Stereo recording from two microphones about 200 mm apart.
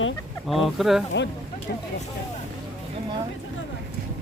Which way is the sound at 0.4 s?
Centre (ahead or behind).